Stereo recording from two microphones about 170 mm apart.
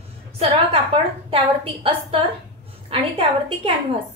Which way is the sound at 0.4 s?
30° right (ahead or behind).